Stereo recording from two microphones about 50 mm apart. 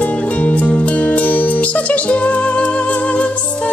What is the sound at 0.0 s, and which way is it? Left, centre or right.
Music, left.